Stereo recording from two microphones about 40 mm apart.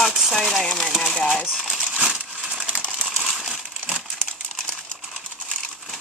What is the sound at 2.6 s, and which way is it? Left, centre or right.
Coin, right.